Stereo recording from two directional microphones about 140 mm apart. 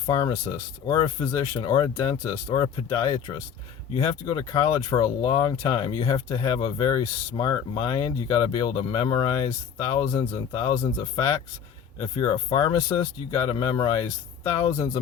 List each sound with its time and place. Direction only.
0.0 s speech: 30° left (ahead or behind)
11.9 s speech: 35° left (ahead or behind)